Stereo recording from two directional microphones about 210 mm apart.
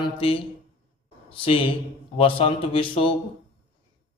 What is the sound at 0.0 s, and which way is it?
Speech, 25° left (ahead or behind).